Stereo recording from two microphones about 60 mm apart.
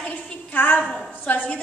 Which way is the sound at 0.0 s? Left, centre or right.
Left.